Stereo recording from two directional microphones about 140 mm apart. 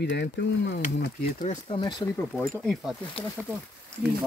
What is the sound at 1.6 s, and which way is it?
Speech, 35° left (ahead or behind).